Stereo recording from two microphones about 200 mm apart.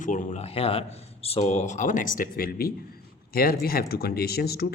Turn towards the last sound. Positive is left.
turn(degrees=50)  # may be behind; listen again after turning